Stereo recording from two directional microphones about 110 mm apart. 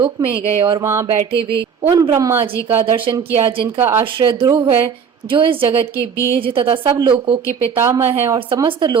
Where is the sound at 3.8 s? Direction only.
20° right (ahead or behind).